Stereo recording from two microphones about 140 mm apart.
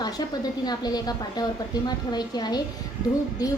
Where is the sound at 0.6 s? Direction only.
30° left (ahead or behind).